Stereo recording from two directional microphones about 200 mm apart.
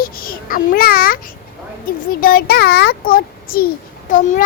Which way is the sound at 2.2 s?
50° left (ahead or behind).